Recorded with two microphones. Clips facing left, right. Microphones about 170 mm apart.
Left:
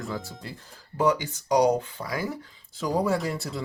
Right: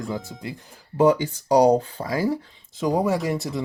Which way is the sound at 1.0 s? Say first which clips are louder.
Right 6 dB; 30° right (ahead or behind).